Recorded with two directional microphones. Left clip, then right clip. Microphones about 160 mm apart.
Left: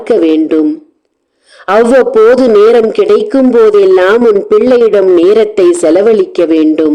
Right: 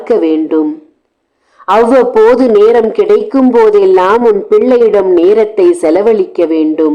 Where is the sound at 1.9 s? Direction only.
15° left (ahead or behind).